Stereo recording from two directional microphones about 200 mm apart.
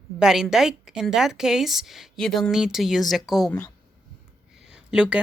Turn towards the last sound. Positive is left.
turn(degrees=-5)  # may be behind; listen again after turning